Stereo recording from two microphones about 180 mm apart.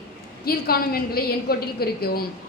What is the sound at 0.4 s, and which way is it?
A woman's voice, 55° left (ahead or behind).